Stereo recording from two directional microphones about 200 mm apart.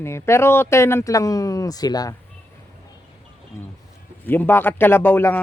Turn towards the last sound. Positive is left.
turn(degrees=10)  # may be behind; listen again after turning